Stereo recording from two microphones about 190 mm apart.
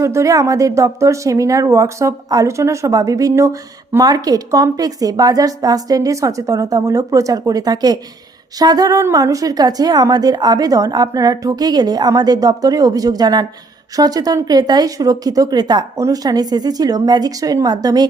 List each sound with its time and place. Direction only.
0.0 s a woman's voice: 15° right (ahead or behind)